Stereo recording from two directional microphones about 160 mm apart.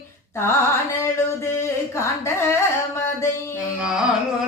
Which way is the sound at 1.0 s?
15° left (ahead or behind).